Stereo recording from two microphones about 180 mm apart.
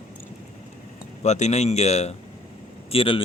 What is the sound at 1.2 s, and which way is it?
A man's voice, 40° left (ahead or behind).